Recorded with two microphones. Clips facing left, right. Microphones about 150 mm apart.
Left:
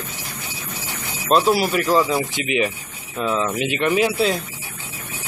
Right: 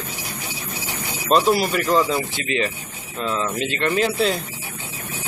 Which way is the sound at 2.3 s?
15° left (ahead or behind).